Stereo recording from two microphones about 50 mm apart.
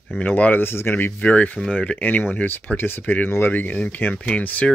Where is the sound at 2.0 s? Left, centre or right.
Left.